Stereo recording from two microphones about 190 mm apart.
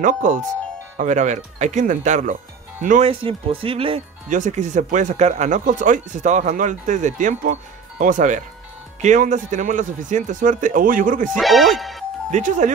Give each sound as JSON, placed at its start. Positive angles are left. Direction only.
{"t": 0.0, "sound": "a man's voice", "side_deg": -40}
{"t": 3.1, "sound": "speech", "side_deg": -30}
{"t": 4.3, "sound": "a man's voice", "side_deg": -40}
{"t": 11.3, "sound": "speech", "side_deg": 0}
{"t": 12.3, "sound": "speech", "side_deg": -40}